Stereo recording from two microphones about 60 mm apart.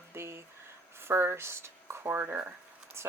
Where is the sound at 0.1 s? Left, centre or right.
Right.